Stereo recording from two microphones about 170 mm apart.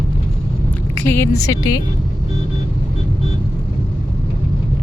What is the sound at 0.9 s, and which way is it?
Speech, 15° left (ahead or behind).